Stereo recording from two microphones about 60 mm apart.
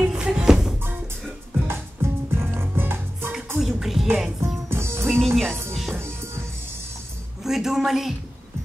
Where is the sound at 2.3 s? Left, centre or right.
Right.